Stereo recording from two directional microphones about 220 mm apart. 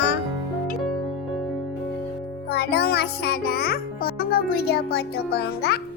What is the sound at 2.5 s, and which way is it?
Music, 45° left (ahead or behind).